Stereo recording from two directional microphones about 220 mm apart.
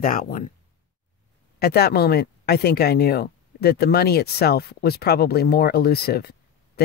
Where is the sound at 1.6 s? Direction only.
45° left (ahead or behind).